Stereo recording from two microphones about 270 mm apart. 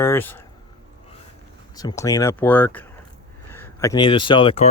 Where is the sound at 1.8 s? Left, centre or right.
Centre.